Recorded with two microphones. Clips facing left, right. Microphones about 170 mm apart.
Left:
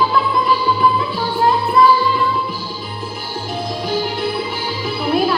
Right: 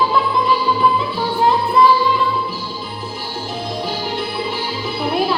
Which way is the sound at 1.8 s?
25° right (ahead or behind).